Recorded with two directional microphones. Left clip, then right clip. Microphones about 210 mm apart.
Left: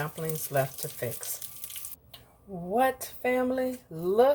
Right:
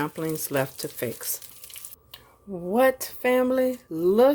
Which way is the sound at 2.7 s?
45° right (ahead or behind).